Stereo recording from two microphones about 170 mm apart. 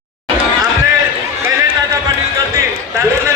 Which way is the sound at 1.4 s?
20° right (ahead or behind).